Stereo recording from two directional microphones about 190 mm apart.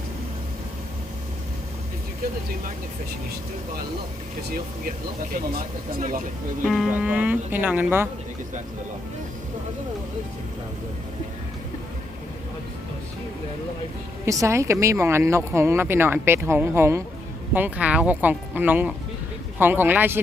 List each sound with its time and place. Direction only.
6.0 s speech: 45° right (ahead or behind)
6.7 s speech: centre (ahead or behind)
14.3 s speech: 15° right (ahead or behind)